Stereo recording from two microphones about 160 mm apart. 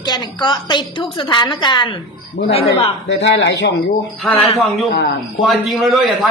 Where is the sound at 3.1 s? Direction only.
90° left.